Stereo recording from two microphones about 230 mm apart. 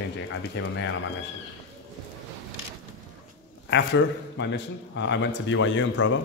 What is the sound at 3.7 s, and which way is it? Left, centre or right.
A man's voice, left.